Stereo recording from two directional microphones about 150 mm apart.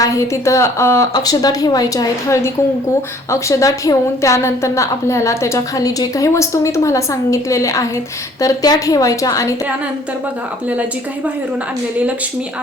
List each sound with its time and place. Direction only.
0.0 s a woman's voice: 20° left (ahead or behind)